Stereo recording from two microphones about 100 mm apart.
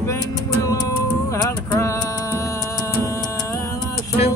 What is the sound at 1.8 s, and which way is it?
Music, 30° left (ahead or behind).